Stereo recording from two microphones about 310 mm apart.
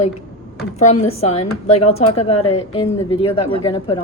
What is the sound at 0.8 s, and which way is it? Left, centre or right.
A woman's voice, left.